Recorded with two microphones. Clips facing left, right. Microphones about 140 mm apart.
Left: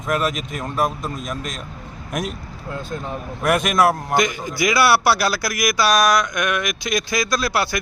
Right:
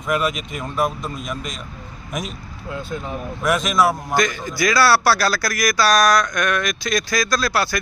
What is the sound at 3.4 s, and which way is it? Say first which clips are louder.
Speech: left 1 dB; 60° left (ahead or behind).